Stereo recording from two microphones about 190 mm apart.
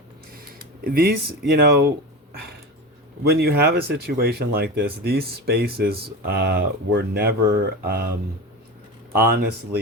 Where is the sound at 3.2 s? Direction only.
55° right (ahead or behind).